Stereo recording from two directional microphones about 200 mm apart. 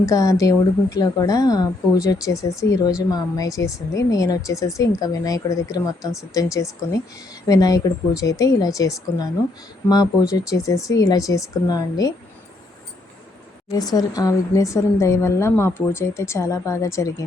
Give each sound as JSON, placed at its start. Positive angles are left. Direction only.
{"t": 0.0, "sound": "speech", "side_deg": 15}
{"t": 13.7, "sound": "speech", "side_deg": 20}